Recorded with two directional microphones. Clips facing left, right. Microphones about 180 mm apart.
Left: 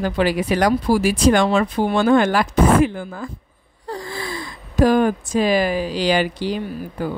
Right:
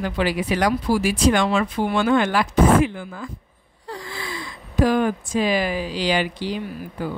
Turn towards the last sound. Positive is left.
turn(degrees=40)  # may be behind; listen again after turning